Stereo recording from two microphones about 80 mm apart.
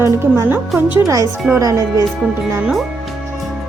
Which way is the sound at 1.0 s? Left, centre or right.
Right.